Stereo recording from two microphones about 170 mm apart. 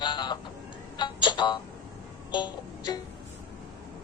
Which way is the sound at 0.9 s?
25° left (ahead or behind).